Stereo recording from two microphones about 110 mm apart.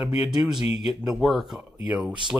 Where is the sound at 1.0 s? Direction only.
5° right (ahead or behind).